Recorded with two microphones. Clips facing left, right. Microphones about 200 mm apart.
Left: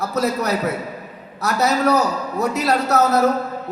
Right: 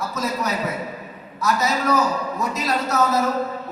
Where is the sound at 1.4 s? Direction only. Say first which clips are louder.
Left 3 dB; 65° left (ahead or behind).